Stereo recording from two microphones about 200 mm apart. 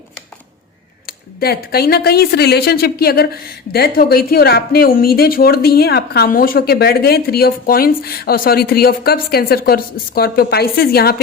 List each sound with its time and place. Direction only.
1.0 s speech: 50° left (ahead or behind)